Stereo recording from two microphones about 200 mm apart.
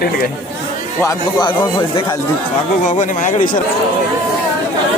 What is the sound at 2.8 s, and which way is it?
Speech, 40° left (ahead or behind).